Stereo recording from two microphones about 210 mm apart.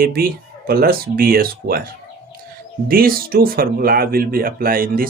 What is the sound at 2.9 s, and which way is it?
Speech, 45° right (ahead or behind).